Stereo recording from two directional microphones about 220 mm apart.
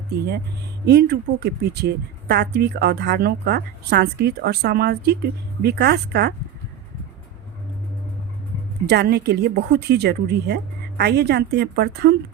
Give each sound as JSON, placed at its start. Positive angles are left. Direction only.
{"t": 0.9, "sound": "a woman's voice", "side_deg": -50}
{"t": 8.9, "sound": "a woman's voice", "side_deg": -50}